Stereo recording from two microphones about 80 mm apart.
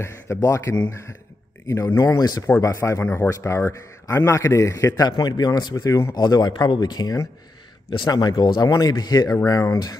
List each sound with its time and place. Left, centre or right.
0.0 s a man's voice: left
2.0 s a man's voice: left